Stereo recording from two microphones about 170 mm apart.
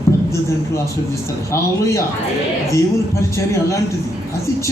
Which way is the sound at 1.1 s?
15° left (ahead or behind).